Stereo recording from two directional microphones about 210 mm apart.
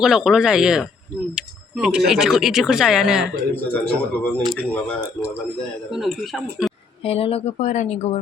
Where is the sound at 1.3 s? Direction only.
5° right (ahead or behind).